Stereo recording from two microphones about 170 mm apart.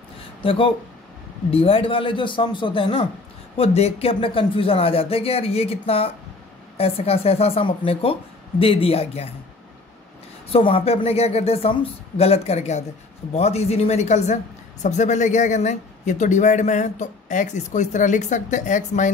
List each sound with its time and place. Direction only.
0.4 s a man's voice: 30° left (ahead or behind)
10.5 s a woman's voice: 35° left (ahead or behind)